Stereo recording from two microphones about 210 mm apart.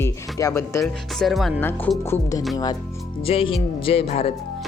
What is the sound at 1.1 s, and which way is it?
Speech, centre (ahead or behind).